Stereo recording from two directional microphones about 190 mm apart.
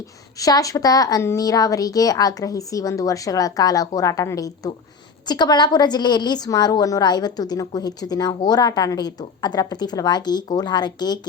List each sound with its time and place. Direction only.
0.3 s a woman's voice: 20° left (ahead or behind)